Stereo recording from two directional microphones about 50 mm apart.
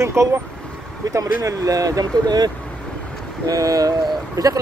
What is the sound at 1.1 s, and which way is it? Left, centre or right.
Speech, right.